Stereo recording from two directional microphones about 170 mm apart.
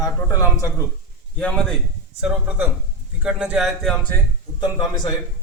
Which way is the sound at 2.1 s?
10° right (ahead or behind).